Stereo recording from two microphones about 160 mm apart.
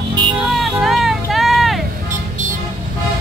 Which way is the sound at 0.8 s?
Centre (ahead or behind).